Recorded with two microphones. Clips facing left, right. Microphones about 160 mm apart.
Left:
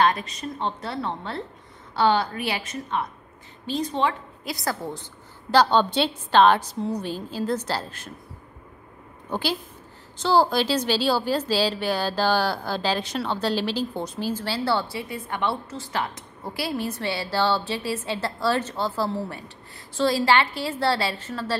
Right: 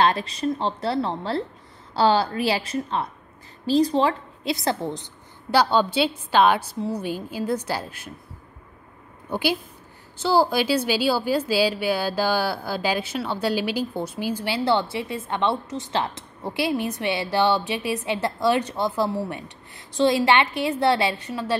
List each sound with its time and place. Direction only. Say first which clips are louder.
0.0 s a woman's voice: right 2 dB; 30° right (ahead or behind); by 8.1 s 10° right (ahead or behind)
9.3 s a woman's voice: right 3 dB; 10° right (ahead or behind)